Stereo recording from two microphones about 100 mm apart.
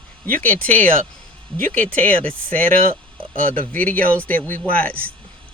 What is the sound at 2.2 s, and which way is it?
Speech, 15° left (ahead or behind).